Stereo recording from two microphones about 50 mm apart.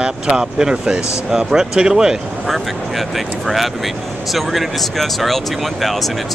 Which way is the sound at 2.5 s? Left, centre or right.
Centre.